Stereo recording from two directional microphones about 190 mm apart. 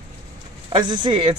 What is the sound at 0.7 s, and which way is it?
Speech, 25° right (ahead or behind).